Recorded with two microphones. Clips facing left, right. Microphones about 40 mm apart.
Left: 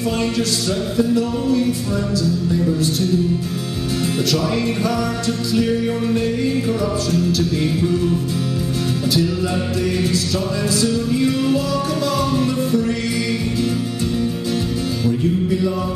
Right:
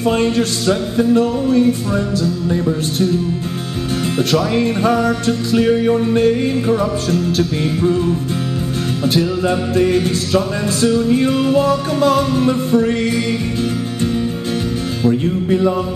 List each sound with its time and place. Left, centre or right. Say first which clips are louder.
0.2 s music: right 4 dB; right
4.3 s music: right 6 dB; right
9.8 s music: right 6 dB; right
15.0 s music: right 4 dB; right